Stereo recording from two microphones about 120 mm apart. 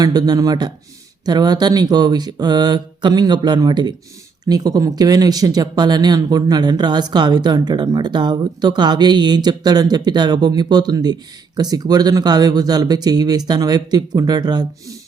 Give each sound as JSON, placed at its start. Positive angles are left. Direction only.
{"t": 0.0, "sound": "speech", "side_deg": -35}